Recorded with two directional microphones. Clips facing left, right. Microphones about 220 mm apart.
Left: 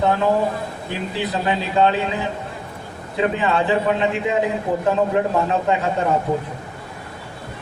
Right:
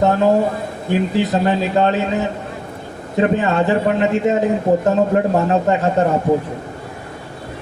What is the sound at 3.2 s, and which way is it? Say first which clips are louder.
A man's voice: right 4 dB; 45° right (ahead or behind).